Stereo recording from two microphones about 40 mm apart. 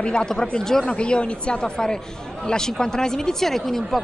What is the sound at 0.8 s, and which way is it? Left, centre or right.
A woman's voice, left.